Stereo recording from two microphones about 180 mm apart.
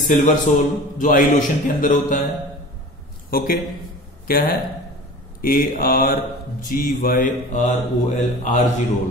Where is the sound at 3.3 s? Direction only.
55° left (ahead or behind).